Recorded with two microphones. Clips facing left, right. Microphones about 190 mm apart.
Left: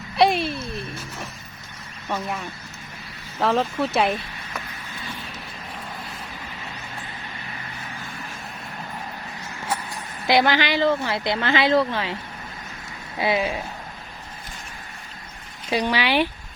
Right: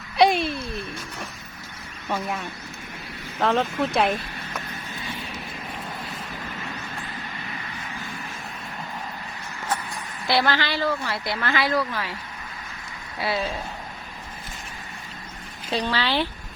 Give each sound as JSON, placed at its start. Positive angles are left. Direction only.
{"t": 0.2, "sound": "a sound", "side_deg": 0}
{"t": 0.7, "sound": "music", "side_deg": 0}
{"t": 2.0, "sound": "speech", "side_deg": 0}
{"t": 3.4, "sound": "speech", "side_deg": 0}
{"t": 10.2, "sound": "a woman's voice", "side_deg": 20}
{"t": 13.1, "sound": "speech", "side_deg": 20}
{"t": 15.7, "sound": "speech", "side_deg": 10}